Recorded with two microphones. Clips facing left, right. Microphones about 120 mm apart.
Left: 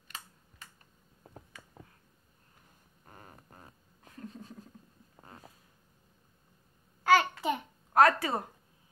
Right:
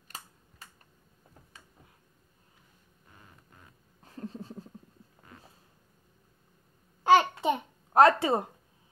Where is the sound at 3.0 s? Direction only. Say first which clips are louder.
Left 5 dB; 45° left (ahead or behind).